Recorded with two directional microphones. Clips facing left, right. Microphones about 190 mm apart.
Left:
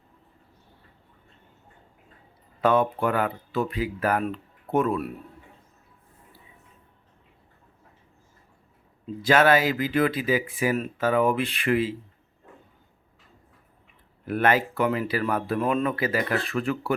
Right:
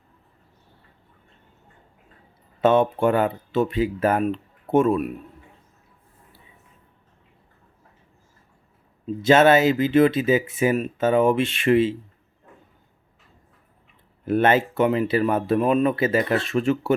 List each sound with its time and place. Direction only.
2.6 s speech: 25° right (ahead or behind)
9.2 s speech: 25° right (ahead or behind)
14.3 s speech: 25° right (ahead or behind)